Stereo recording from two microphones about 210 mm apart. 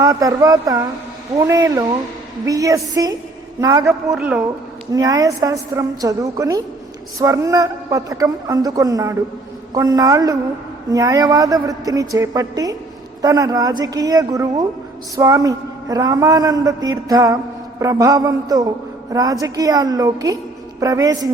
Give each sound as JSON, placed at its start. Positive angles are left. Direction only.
{"t": 0.0, "sound": "a man's voice", "side_deg": -15}
{"t": 4.1, "sound": "speech", "side_deg": -5}
{"t": 4.9, "sound": "a man's voice", "side_deg": -15}